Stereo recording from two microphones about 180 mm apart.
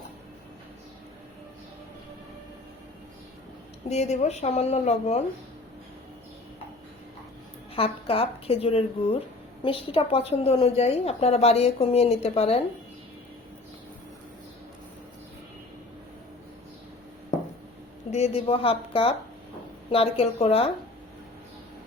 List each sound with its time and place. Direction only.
3.8 s a woman's voice: 40° left (ahead or behind)
7.8 s a woman's voice: 30° left (ahead or behind)
18.1 s a woman's voice: 35° left (ahead or behind)